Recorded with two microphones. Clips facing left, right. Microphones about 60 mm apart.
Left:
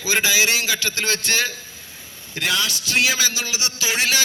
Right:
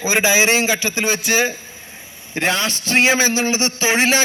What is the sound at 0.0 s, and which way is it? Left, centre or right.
A man's voice, right.